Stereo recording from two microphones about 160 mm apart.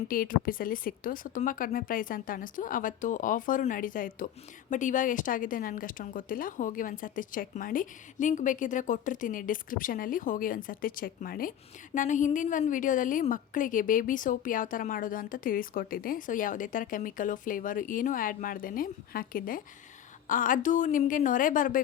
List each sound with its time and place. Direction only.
0.1 s a woman's voice: 60° left (ahead or behind)